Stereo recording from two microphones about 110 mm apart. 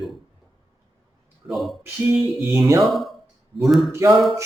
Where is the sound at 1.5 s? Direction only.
Centre (ahead or behind).